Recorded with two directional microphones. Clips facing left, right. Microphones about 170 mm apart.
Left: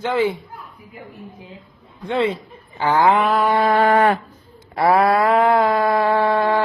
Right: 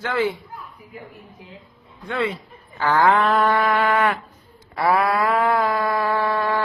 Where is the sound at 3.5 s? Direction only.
35° left (ahead or behind).